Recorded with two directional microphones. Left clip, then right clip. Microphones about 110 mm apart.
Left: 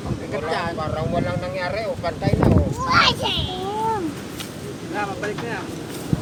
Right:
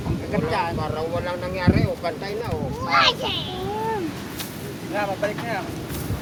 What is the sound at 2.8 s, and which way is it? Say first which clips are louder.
Speech: left 1 dB; 60° left (ahead or behind).